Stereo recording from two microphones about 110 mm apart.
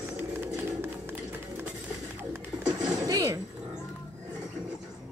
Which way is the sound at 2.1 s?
20° right (ahead or behind).